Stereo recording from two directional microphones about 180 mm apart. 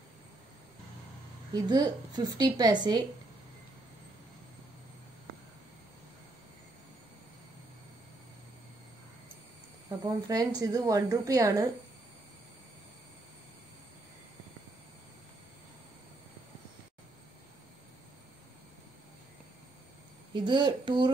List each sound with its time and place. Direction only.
1.5 s speech: 20° right (ahead or behind)
9.8 s speech: 20° right (ahead or behind)
20.4 s speech: 25° right (ahead or behind)